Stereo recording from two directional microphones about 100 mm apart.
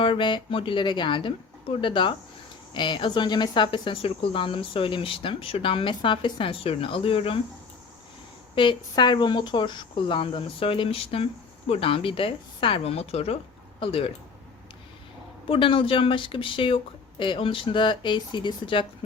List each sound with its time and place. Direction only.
0.0 s speech: 55° left (ahead or behind)
8.5 s a woman's voice: 50° left (ahead or behind); by 13.3 s 90° left
13.7 s speech: 65° left (ahead or behind)
15.4 s speech: 60° left (ahead or behind)